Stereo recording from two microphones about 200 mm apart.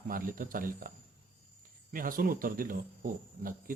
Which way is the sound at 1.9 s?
45° right (ahead or behind).